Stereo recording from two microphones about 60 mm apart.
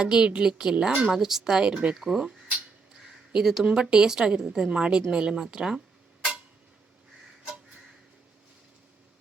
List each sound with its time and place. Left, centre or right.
0.0 s a woman's voice: centre
2.0 s a woman's voice: centre
3.3 s a woman's voice: centre